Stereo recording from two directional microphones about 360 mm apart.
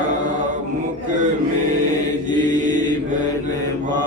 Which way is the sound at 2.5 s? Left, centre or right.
Right.